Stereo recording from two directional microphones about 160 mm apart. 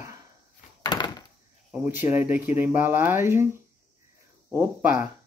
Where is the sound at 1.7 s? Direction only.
10° right (ahead or behind).